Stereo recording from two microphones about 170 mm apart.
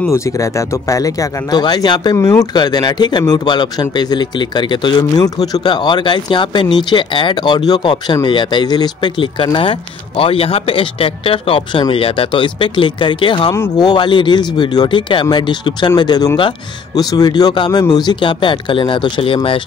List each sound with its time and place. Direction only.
0.1 s speech: 20° left (ahead or behind)